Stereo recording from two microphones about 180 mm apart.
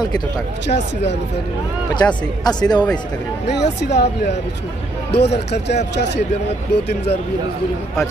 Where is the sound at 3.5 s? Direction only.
70° left (ahead or behind).